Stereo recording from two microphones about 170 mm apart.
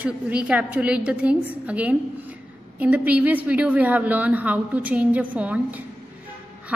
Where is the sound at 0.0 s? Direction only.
5° right (ahead or behind).